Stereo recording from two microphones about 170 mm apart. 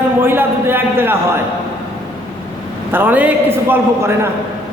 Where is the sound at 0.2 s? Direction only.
10° right (ahead or behind).